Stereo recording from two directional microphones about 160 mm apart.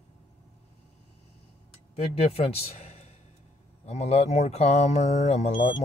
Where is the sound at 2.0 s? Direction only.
40° left (ahead or behind).